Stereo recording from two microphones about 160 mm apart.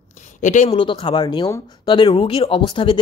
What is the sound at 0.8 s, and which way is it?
Speech, 30° left (ahead or behind).